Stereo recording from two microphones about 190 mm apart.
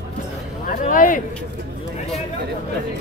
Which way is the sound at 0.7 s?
45° left (ahead or behind).